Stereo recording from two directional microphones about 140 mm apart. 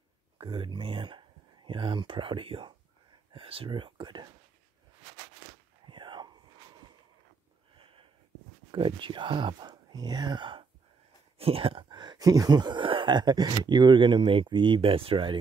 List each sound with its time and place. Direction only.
0.4 s speech: 35° right (ahead or behind)
5.9 s whispering: 35° right (ahead or behind)
7.7 s a sound: 40° right (ahead or behind)
8.7 s speech: 35° right (ahead or behind)